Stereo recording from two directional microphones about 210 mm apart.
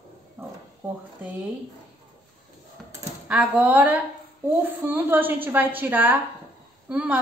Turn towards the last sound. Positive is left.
turn(degrees=-5)  # may be behind; listen again after turning